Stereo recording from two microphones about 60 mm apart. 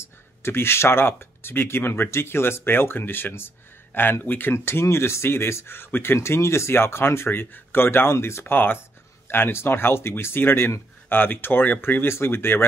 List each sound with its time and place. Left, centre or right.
0.4 s speech: left
6.1 s speech: left
8.5 s speech: left